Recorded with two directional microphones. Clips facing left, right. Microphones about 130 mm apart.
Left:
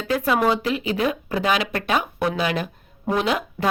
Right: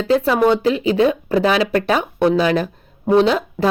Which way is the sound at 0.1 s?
30° right (ahead or behind).